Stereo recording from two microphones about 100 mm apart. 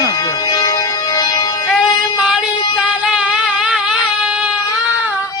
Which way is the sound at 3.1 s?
10° right (ahead or behind).